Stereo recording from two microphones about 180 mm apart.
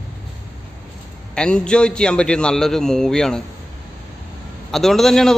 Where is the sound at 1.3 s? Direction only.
5° left (ahead or behind).